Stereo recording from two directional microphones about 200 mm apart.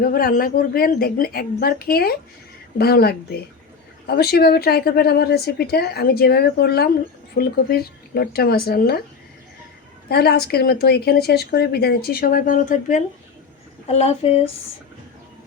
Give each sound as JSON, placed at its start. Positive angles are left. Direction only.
{"t": 0.0, "sound": "a woman's voice", "side_deg": 50}
{"t": 10.1, "sound": "a woman's voice", "side_deg": 50}